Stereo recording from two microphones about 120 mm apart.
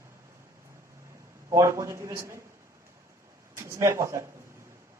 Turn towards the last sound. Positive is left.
turn(degrees=-25)  # may be behind; listen again after turning